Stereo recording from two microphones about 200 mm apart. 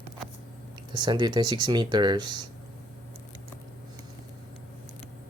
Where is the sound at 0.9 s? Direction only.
20° right (ahead or behind).